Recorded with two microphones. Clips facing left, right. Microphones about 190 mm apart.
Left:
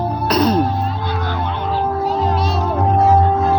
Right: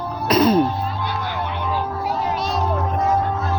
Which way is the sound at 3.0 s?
60° left (ahead or behind).